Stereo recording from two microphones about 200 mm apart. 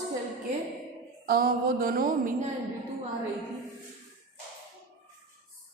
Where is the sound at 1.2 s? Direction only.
45° right (ahead or behind).